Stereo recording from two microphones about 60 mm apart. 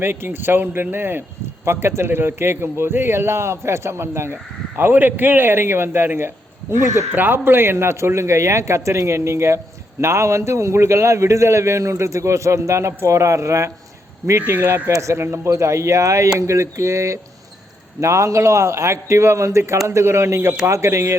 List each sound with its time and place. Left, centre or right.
0.0 s a man's voice: right
14.3 s a man's voice: right
14.9 s a man's voice: right